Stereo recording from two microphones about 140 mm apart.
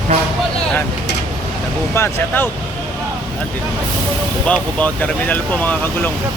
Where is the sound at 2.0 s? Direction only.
15° left (ahead or behind).